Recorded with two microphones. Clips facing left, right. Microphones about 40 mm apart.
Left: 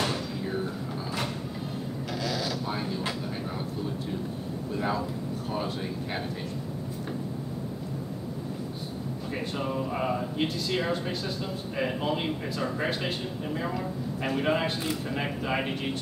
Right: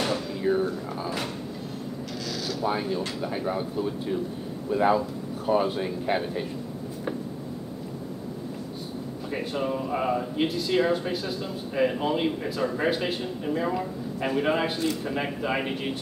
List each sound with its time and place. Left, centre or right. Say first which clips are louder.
0.4 s a sound: right 7 dB; centre
2.6 s speech: right 5 dB; centre
4.6 s speech: right 8 dB; centre
9.3 s speech: right 4 dB; centre